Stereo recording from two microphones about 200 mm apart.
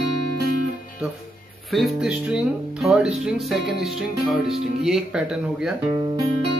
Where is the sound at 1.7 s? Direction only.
Centre (ahead or behind).